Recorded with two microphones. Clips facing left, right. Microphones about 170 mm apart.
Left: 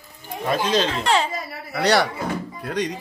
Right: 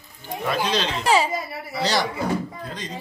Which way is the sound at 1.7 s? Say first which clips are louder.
Left 5 dB; 65° left (ahead or behind).